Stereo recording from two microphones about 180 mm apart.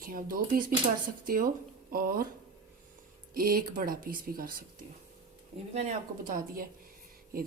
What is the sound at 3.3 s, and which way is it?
Speech, 55° right (ahead or behind).